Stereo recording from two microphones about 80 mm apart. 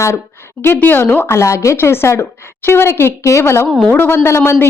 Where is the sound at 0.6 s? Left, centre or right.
Left.